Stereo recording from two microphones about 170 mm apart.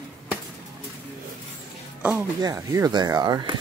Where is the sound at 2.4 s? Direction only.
20° right (ahead or behind).